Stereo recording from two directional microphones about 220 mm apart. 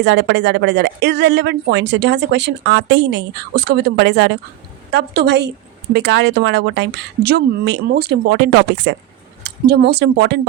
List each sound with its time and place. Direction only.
0.0 s speech: 50° right (ahead or behind)